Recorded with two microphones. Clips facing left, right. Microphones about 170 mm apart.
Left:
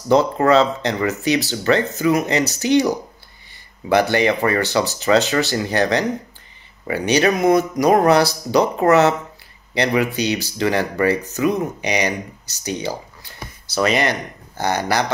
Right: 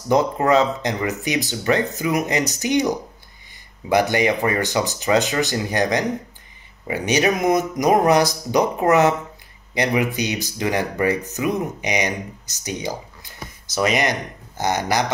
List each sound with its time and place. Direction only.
0.1 s speech: 15° right (ahead or behind)